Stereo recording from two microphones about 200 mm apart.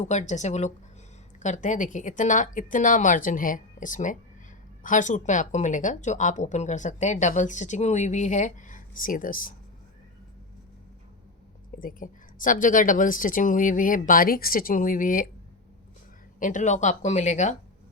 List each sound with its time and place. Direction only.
0.0 s speech: 35° left (ahead or behind)
11.8 s speech: 45° left (ahead or behind)
16.4 s speech: 40° left (ahead or behind)